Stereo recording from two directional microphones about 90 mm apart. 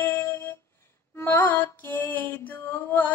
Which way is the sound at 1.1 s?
25° left (ahead or behind).